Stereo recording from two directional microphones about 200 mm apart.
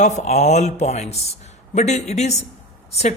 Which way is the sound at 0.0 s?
35° left (ahead or behind).